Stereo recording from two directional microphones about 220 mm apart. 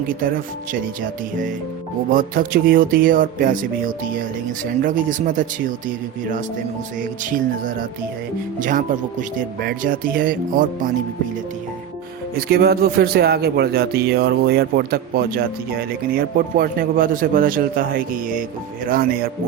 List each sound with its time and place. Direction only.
2.0 s music: 40° right (ahead or behind)
8.5 s music: 35° right (ahead or behind)
12.5 s speech: 45° right (ahead or behind)
18.9 s music: 40° right (ahead or behind)